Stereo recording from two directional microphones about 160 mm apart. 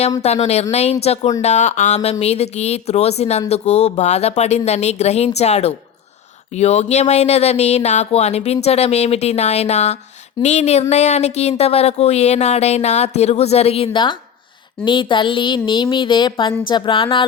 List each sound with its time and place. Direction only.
0.2 s speech: 40° left (ahead or behind)